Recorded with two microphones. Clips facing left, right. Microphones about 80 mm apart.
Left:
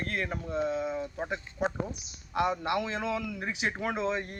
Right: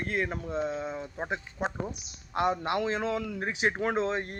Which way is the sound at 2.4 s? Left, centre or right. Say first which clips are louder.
Right 1 dB; right.